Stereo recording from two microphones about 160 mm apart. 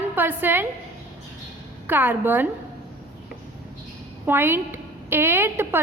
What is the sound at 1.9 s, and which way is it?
Speech, 10° right (ahead or behind).